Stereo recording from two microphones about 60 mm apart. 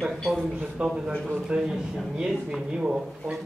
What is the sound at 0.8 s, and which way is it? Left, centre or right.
Speech, centre.